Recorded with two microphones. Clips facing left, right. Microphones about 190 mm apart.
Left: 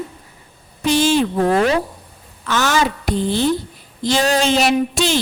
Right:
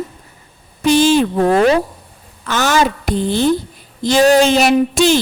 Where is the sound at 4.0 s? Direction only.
50° right (ahead or behind).